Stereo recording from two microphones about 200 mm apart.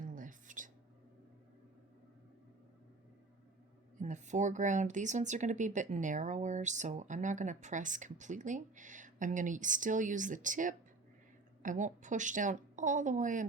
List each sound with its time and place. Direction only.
0.0 s whispering: 40° right (ahead or behind)
4.0 s speech: 35° right (ahead or behind)